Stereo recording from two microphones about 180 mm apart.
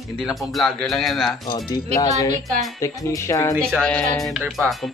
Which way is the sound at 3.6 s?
5° left (ahead or behind).